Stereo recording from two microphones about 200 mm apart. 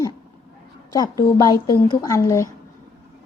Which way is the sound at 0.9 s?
20° left (ahead or behind).